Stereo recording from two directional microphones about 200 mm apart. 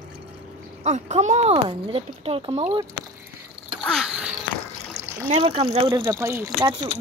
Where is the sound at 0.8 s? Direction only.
35° right (ahead or behind).